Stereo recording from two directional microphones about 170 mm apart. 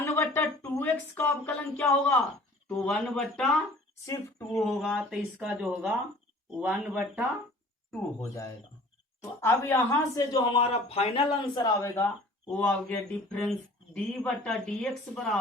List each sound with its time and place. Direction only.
0.0 s a sound: 15° left (ahead or behind)
2.6 s speech: 5° left (ahead or behind)
4.0 s speech: 20° left (ahead or behind)
4.5 s speech: centre (ahead or behind)
9.4 s speech: 15° left (ahead or behind)
10.6 s a man's voice: 35° left (ahead or behind)
11.5 s speech: 20° left (ahead or behind)
12.5 s speech: 5° left (ahead or behind)